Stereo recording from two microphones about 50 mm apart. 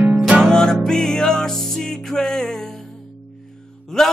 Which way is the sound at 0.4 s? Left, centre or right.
Centre.